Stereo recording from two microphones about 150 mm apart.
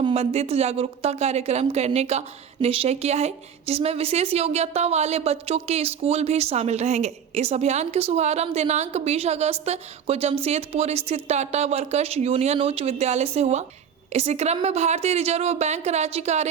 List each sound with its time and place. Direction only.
0.0 s a woman's voice: 45° right (ahead or behind)